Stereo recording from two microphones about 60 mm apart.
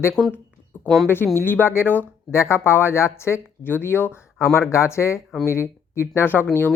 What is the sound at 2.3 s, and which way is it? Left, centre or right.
Speech, left.